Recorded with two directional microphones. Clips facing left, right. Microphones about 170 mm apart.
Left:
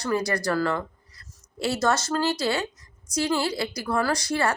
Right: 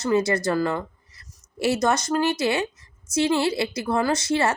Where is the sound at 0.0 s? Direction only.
25° right (ahead or behind).